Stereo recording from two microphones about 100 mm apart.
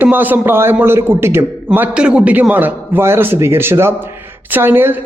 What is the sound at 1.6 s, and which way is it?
A man's voice, 15° right (ahead or behind).